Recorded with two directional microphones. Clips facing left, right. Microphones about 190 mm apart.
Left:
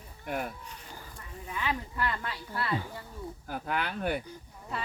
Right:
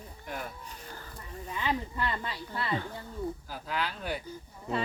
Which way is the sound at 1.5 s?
20° right (ahead or behind).